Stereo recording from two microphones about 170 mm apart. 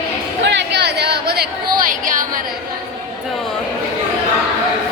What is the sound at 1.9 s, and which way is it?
Speech, 50° right (ahead or behind).